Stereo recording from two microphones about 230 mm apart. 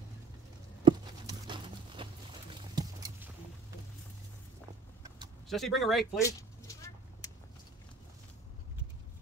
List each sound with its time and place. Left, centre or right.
0.8 s patter: right
2.7 s clip-clop: centre
5.5 s speech: centre
6.1 s a sound: centre